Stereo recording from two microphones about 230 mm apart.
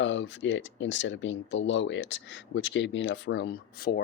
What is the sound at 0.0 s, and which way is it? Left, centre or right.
Speech, left.